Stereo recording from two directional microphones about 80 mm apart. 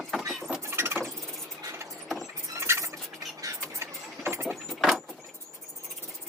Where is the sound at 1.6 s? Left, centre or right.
Right.